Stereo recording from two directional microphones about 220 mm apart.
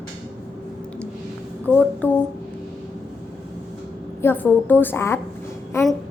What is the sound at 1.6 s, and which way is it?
Speech, 5° left (ahead or behind).